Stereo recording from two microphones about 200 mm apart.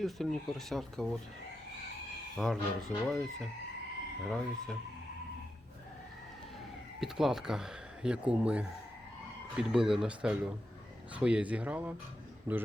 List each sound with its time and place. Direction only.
0.0 s speech: centre (ahead or behind)
2.3 s speech: centre (ahead or behind)
7.0 s speech: centre (ahead or behind)